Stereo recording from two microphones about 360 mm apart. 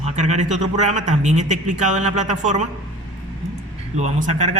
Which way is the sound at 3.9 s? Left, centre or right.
Centre.